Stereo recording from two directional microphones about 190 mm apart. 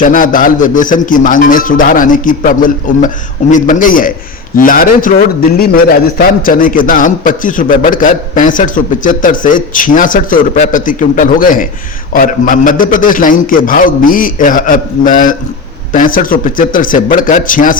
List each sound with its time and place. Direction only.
0.0 s a man's voice: 45° left (ahead or behind)